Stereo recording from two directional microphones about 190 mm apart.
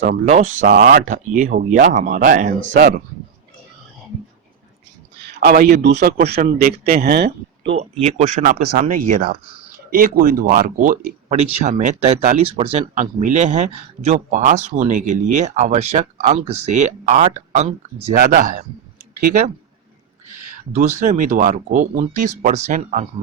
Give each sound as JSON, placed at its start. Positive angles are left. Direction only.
{"t": 0.0, "sound": "speech", "side_deg": -40}
{"t": 0.7, "sound": "speech", "side_deg": -50}
{"t": 5.2, "sound": "a man's voice", "side_deg": -60}
{"t": 7.7, "sound": "speech", "side_deg": -35}
{"t": 20.7, "sound": "speech", "side_deg": -40}